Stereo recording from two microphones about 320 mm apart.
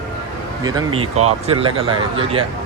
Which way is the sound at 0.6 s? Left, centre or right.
Centre.